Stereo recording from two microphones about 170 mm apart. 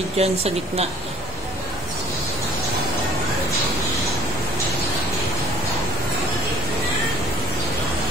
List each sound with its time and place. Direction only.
0.2 s speech: 35° right (ahead or behind)